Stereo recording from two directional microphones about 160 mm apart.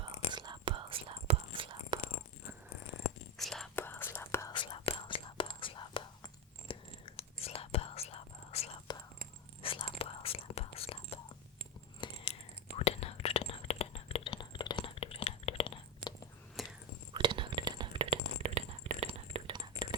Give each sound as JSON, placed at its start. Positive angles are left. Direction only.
{"t": 0.3, "sound": "whispering", "side_deg": -25}
{"t": 3.3, "sound": "whispering", "side_deg": 0}
{"t": 3.8, "sound": "whispering", "side_deg": 15}
{"t": 6.7, "sound": "chewing", "side_deg": 30}
{"t": 7.2, "sound": "whispering", "side_deg": 35}
{"t": 11.9, "sound": "a sound", "side_deg": 30}
{"t": 12.7, "sound": "whispering", "side_deg": 40}
{"t": 16.6, "sound": "a sound", "side_deg": 0}
{"t": 17.2, "sound": "whispering", "side_deg": -30}